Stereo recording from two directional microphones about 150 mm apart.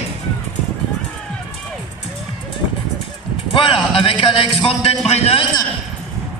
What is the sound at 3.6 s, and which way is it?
A man's voice, 35° left (ahead or behind).